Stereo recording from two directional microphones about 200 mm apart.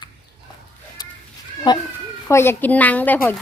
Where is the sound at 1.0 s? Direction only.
20° left (ahead or behind).